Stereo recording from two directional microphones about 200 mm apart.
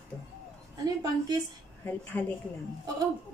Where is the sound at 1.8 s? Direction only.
10° left (ahead or behind).